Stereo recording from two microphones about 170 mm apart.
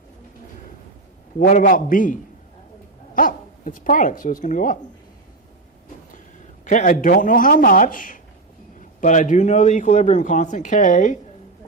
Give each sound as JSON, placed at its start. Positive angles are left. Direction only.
{"t": 1.4, "sound": "speech", "side_deg": 50}
{"t": 3.2, "sound": "speech", "side_deg": 50}
{"t": 6.7, "sound": "speech", "side_deg": 50}